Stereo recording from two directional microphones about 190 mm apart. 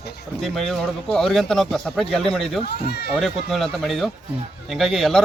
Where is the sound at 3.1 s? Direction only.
Centre (ahead or behind).